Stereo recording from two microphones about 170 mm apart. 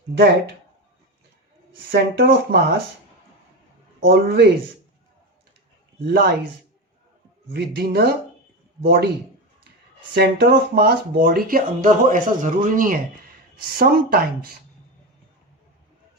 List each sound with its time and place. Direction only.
0.1 s speech: 70° right (ahead or behind)
1.9 s speech: 70° right (ahead or behind)
4.1 s speech: 75° right (ahead or behind)
6.1 s speech: 70° right (ahead or behind)
7.5 s speech: 70° right (ahead or behind)
10.2 s speech: 70° right (ahead or behind)